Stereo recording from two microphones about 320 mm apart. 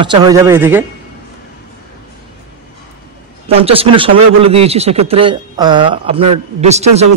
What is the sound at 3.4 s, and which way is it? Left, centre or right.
A man's voice, centre.